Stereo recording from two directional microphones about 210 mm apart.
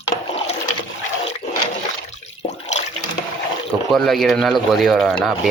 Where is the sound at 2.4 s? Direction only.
30° left (ahead or behind).